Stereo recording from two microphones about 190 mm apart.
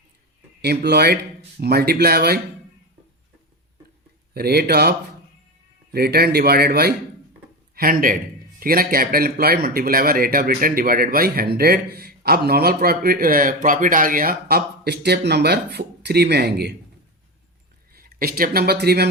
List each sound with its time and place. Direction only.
0.6 s speech: 60° right (ahead or behind)
4.4 s a man's voice: 55° right (ahead or behind)
17.9 s speech: 50° right (ahead or behind)